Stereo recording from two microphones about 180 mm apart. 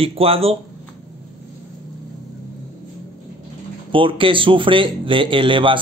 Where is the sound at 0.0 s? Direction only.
30° right (ahead or behind).